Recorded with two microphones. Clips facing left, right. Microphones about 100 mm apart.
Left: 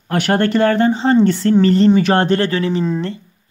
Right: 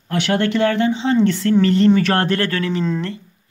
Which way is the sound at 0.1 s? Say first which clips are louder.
Left 3 dB; 45° left (ahead or behind).